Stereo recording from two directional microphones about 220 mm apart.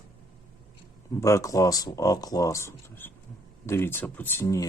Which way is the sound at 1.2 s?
15° left (ahead or behind).